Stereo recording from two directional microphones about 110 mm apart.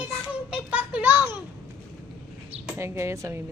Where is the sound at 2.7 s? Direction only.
25° right (ahead or behind).